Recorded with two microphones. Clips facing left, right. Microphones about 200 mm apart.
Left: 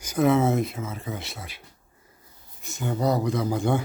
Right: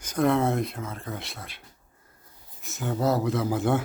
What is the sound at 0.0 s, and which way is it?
Speech, 5° left (ahead or behind).